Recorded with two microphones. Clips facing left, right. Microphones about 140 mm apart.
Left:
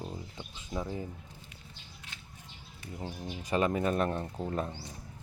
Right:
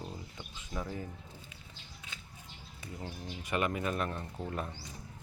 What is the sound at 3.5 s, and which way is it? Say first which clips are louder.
Speech: left 4 dB; 35° left (ahead or behind).